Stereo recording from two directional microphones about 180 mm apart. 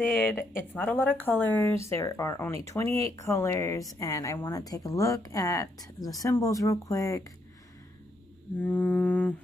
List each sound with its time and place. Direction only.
0.7 s speech: 10° left (ahead or behind)
8.6 s speech: 10° left (ahead or behind)